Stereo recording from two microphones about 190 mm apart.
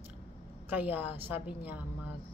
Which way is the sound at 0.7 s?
10° right (ahead or behind).